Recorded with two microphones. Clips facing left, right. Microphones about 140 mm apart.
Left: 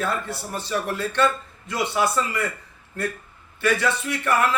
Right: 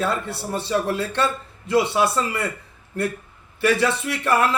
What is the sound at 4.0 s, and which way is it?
Speech, 30° right (ahead or behind).